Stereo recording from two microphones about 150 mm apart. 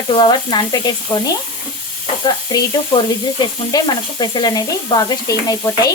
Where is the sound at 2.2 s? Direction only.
30° left (ahead or behind).